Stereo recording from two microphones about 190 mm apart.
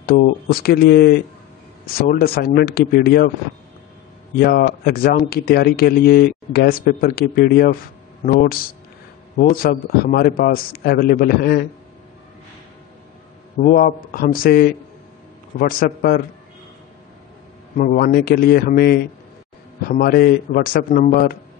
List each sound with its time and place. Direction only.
0.0 s speech: 55° left (ahead or behind)
4.4 s speech: 50° left (ahead or behind)
13.6 s speech: 45° left (ahead or behind)
15.8 s speech: 50° left (ahead or behind)
17.7 s speech: 50° left (ahead or behind)
20.9 s a man's voice: 35° left (ahead or behind)